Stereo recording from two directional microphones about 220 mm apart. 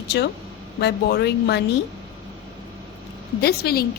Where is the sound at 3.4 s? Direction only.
45° left (ahead or behind).